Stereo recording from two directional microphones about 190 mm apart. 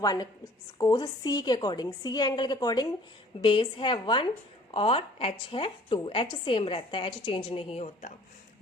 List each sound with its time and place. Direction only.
0.0 s a woman's voice: 20° left (ahead or behind)